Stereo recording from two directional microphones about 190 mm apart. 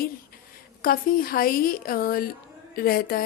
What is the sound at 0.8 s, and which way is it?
A woman's voice, 45° left (ahead or behind).